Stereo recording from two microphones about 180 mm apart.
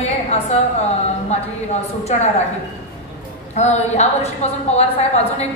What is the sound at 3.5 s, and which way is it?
A woman's voice, 40° left (ahead or behind).